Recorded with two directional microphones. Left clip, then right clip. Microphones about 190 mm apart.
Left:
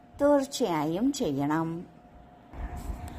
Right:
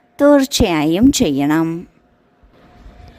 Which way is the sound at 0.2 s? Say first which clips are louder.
Right 12 dB; 55° right (ahead or behind).